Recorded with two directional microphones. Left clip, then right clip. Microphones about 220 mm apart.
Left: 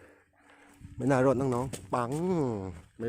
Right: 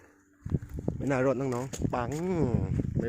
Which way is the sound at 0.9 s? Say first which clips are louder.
Left 2 dB; 15° left (ahead or behind).